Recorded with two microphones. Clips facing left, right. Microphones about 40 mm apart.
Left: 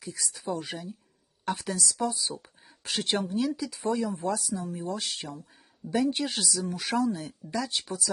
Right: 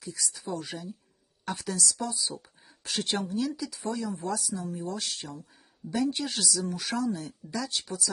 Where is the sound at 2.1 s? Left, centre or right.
Left.